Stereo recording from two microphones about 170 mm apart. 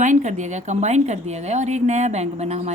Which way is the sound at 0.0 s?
45° right (ahead or behind).